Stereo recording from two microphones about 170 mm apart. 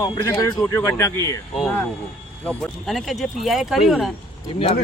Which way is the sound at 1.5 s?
Centre (ahead or behind).